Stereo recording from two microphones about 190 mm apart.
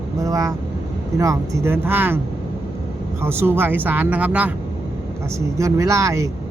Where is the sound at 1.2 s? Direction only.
15° right (ahead or behind).